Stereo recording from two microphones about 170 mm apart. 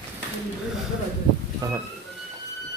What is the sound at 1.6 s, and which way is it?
Speech, 20° right (ahead or behind).